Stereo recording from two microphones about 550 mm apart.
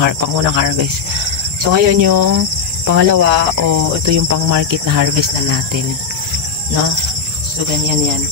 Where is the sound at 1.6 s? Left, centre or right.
Right.